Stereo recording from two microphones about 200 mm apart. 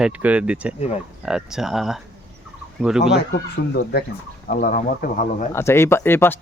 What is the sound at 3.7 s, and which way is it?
Speech, 50° left (ahead or behind).